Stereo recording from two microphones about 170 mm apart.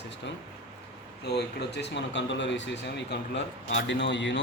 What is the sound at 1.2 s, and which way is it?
Speech, 75° left (ahead or behind).